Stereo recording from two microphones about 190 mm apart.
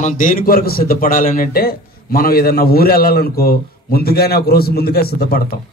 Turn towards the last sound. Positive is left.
turn(degrees=55)  # may be behind; listen again after turning